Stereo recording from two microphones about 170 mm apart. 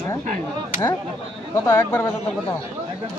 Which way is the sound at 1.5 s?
15° left (ahead or behind).